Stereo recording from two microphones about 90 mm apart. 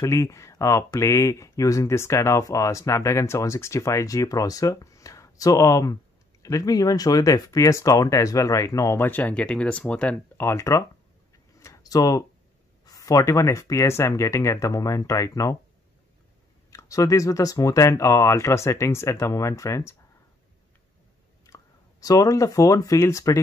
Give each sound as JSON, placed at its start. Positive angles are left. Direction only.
{"t": 0.0, "sound": "speech", "side_deg": 35}
{"t": 9.0, "sound": "speech", "side_deg": 20}
{"t": 11.6, "sound": "a sound", "side_deg": 40}
{"t": 12.8, "sound": "speech", "side_deg": 40}
{"t": 16.7, "sound": "speech", "side_deg": 40}
{"t": 21.5, "sound": "a sound", "side_deg": 35}
{"t": 22.0, "sound": "speech", "side_deg": 40}